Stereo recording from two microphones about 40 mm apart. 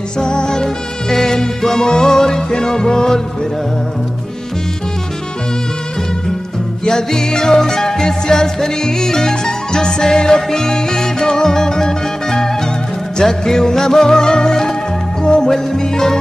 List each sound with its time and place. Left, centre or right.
0.2 s music: centre
6.8 s music: centre